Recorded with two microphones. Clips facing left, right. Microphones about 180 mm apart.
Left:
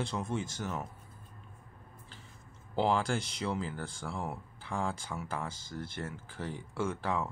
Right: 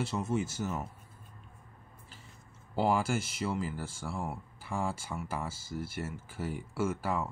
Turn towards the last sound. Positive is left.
turn(degrees=-5)  # may be behind; listen again after turning